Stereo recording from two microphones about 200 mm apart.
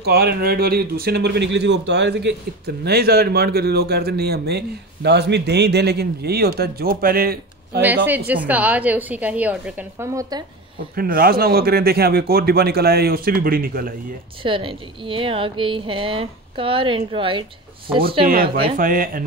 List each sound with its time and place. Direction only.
0.0 s speech: 50° right (ahead or behind)
7.8 s a woman's voice: 10° right (ahead or behind)
11.0 s speech: 50° right (ahead or behind)
14.4 s a woman's voice: 25° right (ahead or behind)
18.2 s speech: 45° right (ahead or behind)